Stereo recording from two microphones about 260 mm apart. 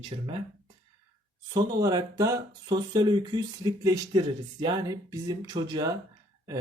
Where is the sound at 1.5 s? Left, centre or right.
Centre.